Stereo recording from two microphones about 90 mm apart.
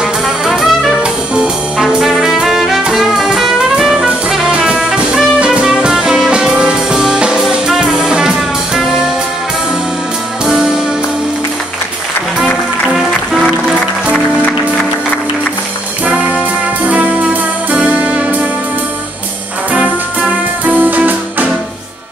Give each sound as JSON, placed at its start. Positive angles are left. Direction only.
{"t": 0.0, "sound": "brass instrument", "side_deg": 0}
{"t": 10.4, "sound": "music", "side_deg": -10}
{"t": 13.3, "sound": "music", "side_deg": -5}
{"t": 16.8, "sound": "music", "side_deg": -15}
{"t": 19.7, "sound": "music", "side_deg": -15}